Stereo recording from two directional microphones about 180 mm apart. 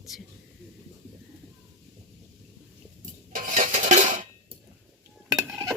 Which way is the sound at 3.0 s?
45° right (ahead or behind).